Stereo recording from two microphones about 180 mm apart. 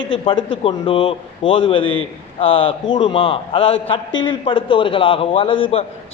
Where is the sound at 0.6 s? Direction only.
30° left (ahead or behind).